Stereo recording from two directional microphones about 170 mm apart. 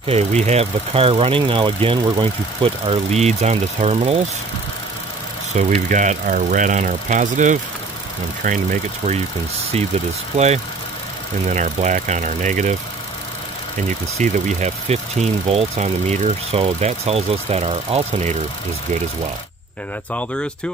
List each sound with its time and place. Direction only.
0.0 s speech: 40° right (ahead or behind)
5.5 s speech: 45° right (ahead or behind)
10.3 s speech: 40° right (ahead or behind)
14.1 s speech: 45° right (ahead or behind)
20.1 s speech: 10° left (ahead or behind)